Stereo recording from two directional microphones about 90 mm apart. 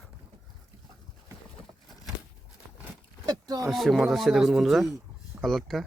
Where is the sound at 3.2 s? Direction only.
45° right (ahead or behind).